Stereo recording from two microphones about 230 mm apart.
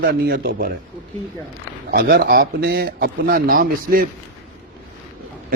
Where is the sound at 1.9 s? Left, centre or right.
Right.